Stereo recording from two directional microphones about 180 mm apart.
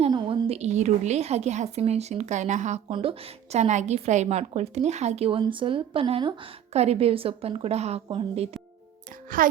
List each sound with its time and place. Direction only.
0.1 s a woman's voice: 30° right (ahead or behind)
2.9 s a woman's voice: 30° right (ahead or behind)
9.4 s a child's voice: 50° right (ahead or behind)